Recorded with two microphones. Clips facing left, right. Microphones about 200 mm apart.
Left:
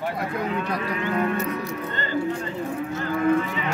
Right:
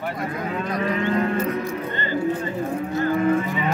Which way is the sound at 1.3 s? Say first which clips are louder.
Right 3 dB; 70° left (ahead or behind).